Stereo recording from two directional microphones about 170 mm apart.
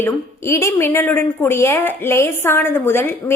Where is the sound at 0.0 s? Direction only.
15° left (ahead or behind).